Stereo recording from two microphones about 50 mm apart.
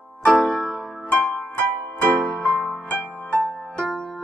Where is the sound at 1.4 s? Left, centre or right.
Left.